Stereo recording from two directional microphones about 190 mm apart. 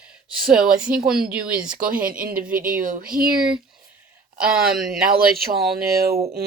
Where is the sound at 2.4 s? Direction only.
50° right (ahead or behind).